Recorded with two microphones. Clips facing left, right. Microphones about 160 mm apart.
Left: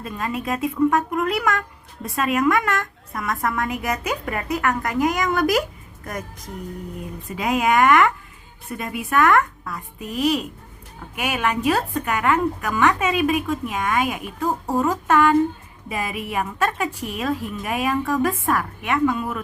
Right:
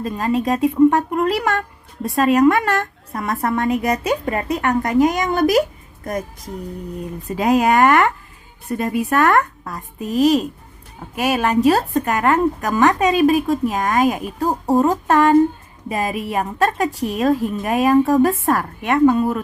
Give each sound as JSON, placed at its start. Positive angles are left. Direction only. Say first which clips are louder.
{"t": 0.0, "sound": "a woman's voice", "louder": "right 7 dB", "side_deg": -35}
{"t": 7.3, "sound": "a woman's voice", "louder": "right 5 dB", "side_deg": -40}